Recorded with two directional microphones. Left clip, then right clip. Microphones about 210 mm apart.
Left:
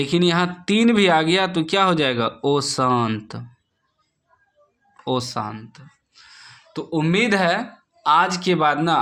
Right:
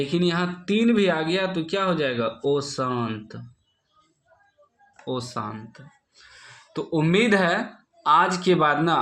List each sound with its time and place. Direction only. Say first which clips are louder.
0.0 s speech: left 5 dB; 25° left (ahead or behind)
5.0 s speech: left 6 dB; 25° left (ahead or behind); by 9.0 s 5° left (ahead or behind)